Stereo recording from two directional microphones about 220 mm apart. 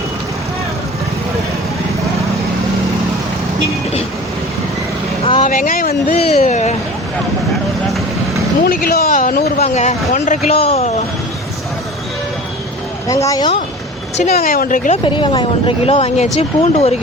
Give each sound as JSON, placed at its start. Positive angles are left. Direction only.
{"t": 5.2, "sound": "vehicle", "side_deg": 25}
{"t": 5.5, "sound": "a sound", "side_deg": 40}
{"t": 8.6, "sound": "speech", "side_deg": 45}
{"t": 13.1, "sound": "speech", "side_deg": 15}
{"t": 14.3, "sound": "speech", "side_deg": 40}
{"t": 15.0, "sound": "speech", "side_deg": 20}